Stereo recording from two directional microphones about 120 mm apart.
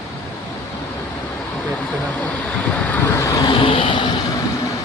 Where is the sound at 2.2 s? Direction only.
10° left (ahead or behind).